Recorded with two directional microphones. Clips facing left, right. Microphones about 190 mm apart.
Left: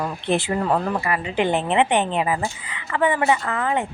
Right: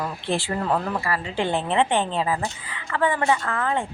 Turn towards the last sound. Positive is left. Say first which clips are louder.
# left 2 dB
turn(degrees=15)  # may be behind; listen again after turning